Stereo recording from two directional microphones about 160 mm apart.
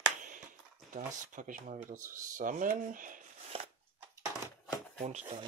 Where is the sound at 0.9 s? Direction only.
55° right (ahead or behind).